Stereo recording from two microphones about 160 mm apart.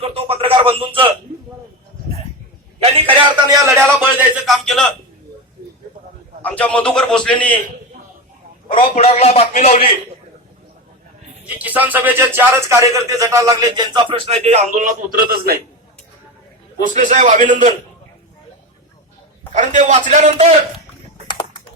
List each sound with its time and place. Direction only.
0.0 s speech: 40° right (ahead or behind)
3.5 s speech: 20° right (ahead or behind)
4.4 s a man's voice: centre (ahead or behind)
6.4 s a man's voice: 10° left (ahead or behind)
8.7 s a man's voice: 35° left (ahead or behind)
11.4 s speech: 10° right (ahead or behind); by 15.5 s 65° right (ahead or behind)
16.8 s a man's voice: 50° right (ahead or behind)
19.5 s a man's voice: 50° right (ahead or behind)